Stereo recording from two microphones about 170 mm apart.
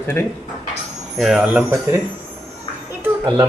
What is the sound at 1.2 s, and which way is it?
Speech, 5° right (ahead or behind).